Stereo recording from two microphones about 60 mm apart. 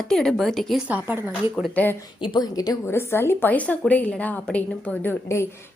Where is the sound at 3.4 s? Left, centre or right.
Left.